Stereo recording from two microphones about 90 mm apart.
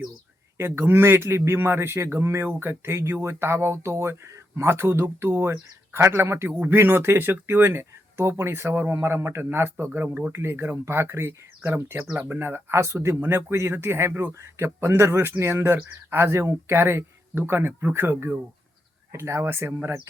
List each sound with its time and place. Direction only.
0.6 s speech: 25° right (ahead or behind)